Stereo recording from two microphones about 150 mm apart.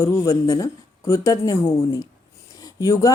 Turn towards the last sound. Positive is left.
turn(degrees=20)  # may be behind; listen again after turning